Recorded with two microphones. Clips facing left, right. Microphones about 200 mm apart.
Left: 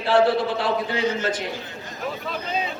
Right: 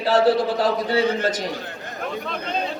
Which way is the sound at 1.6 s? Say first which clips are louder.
Right 2 dB; 60° right (ahead or behind).